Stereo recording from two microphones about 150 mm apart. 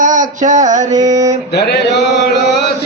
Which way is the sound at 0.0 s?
55° right (ahead or behind).